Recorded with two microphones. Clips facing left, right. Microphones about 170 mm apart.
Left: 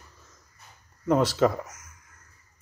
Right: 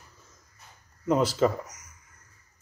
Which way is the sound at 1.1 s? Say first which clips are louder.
Left 1 dB; 10° right (ahead or behind).